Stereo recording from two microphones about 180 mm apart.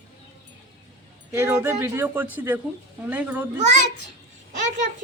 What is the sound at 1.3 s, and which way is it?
Speech, 15° right (ahead or behind).